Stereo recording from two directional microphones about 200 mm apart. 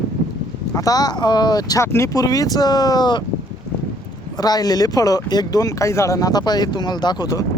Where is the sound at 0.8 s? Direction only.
20° left (ahead or behind).